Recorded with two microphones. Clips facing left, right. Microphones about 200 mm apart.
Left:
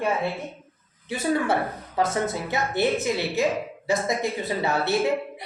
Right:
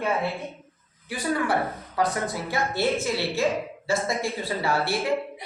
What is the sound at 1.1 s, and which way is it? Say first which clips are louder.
A woman's voice: left 2 dB; 25° left (ahead or behind).